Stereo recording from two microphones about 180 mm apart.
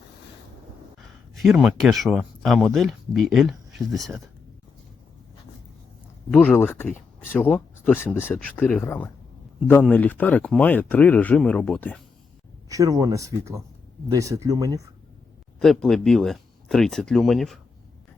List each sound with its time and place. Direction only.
1.4 s speech: centre (ahead or behind)
6.3 s speech: 5° left (ahead or behind)
8.1 s speech: 5° right (ahead or behind)
8.4 s speech: 10° left (ahead or behind)
12.6 s speech: 20° right (ahead or behind)
15.5 s speech: centre (ahead or behind)